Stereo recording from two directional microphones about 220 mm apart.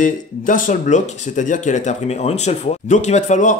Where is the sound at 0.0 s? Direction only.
35° left (ahead or behind).